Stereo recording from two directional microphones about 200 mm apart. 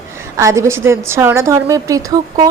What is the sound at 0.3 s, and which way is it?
A woman's voice, 15° right (ahead or behind).